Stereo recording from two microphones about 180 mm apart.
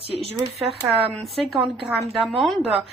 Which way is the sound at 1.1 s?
Centre (ahead or behind).